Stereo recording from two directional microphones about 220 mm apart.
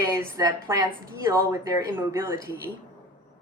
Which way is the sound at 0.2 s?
15° right (ahead or behind).